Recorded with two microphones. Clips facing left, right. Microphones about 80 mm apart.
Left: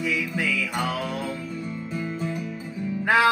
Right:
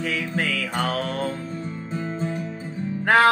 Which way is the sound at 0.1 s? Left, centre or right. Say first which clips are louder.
Right 1 dB; right.